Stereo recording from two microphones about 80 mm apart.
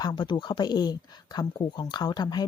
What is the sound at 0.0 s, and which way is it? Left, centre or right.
Speech, left.